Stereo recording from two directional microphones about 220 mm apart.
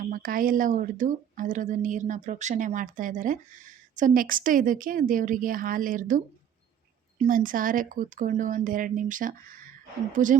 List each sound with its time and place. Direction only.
0.0 s speech: 40° right (ahead or behind)